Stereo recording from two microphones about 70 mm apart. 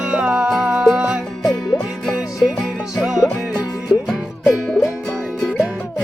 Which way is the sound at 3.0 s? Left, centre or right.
Centre.